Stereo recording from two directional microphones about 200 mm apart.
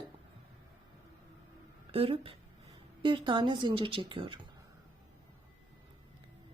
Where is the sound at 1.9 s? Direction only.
30° right (ahead or behind).